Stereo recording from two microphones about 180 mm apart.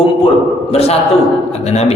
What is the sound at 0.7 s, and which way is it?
A man's voice, 35° left (ahead or behind).